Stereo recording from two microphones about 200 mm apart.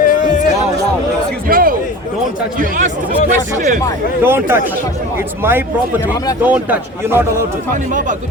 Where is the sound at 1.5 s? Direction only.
45° right (ahead or behind).